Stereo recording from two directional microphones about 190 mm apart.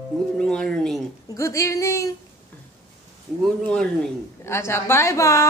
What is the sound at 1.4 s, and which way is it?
Speech, 15° left (ahead or behind).